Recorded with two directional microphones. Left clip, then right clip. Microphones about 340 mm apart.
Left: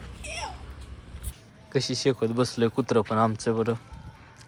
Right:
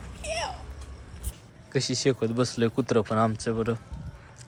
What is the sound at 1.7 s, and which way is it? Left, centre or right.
Speech, centre.